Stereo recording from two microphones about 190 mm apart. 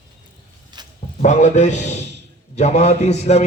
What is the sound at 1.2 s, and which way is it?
Speech, 40° left (ahead or behind).